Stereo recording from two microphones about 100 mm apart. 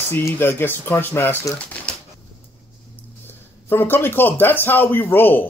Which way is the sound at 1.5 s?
15° left (ahead or behind).